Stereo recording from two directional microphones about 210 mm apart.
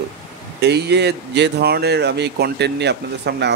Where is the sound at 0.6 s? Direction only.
50° right (ahead or behind).